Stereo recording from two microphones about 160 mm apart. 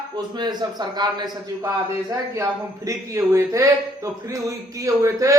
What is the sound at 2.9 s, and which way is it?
Speech, 20° right (ahead or behind).